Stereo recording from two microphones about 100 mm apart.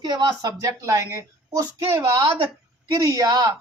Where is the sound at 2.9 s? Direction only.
30° right (ahead or behind).